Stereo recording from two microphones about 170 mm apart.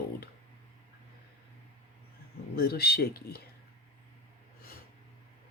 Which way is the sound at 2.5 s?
65° left (ahead or behind).